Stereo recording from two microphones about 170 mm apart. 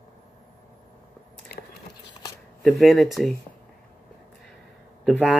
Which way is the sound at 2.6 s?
Centre (ahead or behind).